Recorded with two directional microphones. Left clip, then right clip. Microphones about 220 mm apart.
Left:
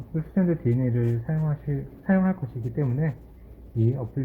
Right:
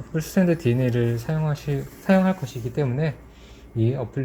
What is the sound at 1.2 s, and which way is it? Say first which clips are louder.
Speech: right 4 dB; 25° right (ahead or behind).